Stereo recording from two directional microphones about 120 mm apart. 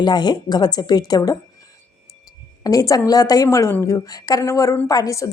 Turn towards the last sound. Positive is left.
turn(degrees=30)  # may be behind; listen again after turning